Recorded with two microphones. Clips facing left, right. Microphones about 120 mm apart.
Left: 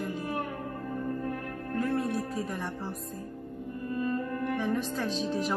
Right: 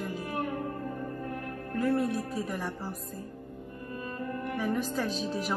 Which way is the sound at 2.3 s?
Centre (ahead or behind).